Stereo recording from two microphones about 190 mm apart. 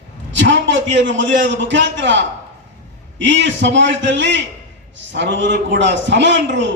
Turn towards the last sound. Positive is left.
turn(degrees=-70)  # may be behind; listen again after turning